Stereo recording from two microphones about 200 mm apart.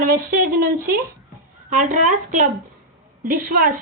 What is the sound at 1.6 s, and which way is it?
A woman's voice, 40° right (ahead or behind).